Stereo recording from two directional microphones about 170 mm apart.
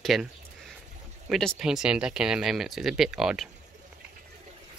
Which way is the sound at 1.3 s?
Centre (ahead or behind).